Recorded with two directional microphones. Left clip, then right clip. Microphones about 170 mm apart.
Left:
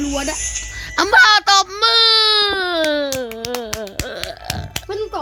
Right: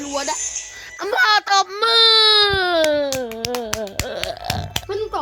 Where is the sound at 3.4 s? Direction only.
15° right (ahead or behind).